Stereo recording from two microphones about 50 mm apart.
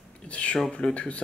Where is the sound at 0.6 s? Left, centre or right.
Left.